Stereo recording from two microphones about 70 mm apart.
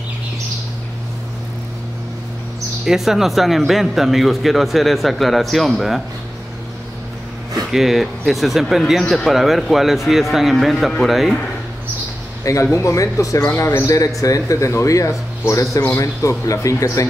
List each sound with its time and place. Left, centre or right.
2.8 s speech: centre
7.7 s speech: centre
12.7 s speech: left